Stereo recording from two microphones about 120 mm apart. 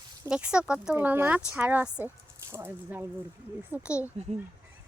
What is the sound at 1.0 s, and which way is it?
Speech, 20° right (ahead or behind).